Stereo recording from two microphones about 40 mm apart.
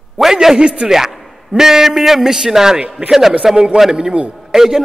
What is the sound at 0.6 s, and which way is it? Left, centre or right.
Speech, right.